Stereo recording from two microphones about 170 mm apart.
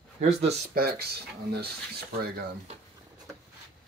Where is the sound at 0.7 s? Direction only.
65° right (ahead or behind).